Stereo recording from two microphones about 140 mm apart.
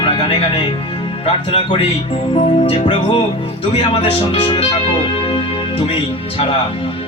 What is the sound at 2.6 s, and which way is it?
Speech, 40° left (ahead or behind).